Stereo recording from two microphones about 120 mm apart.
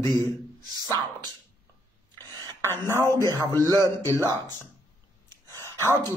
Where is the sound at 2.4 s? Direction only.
20° left (ahead or behind).